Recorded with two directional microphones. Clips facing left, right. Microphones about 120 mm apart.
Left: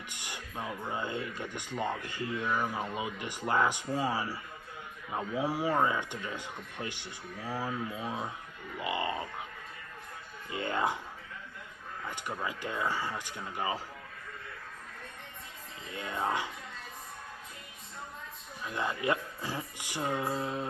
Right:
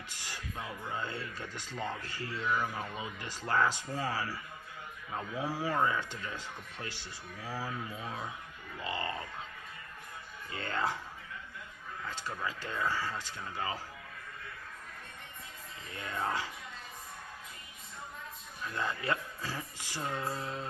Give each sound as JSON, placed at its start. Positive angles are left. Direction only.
{"t": 0.1, "sound": "speech", "side_deg": 20}
{"t": 10.5, "sound": "speech", "side_deg": 20}
{"t": 12.1, "sound": "speech", "side_deg": 15}
{"t": 15.9, "sound": "speech", "side_deg": 20}
{"t": 18.6, "sound": "speech", "side_deg": 20}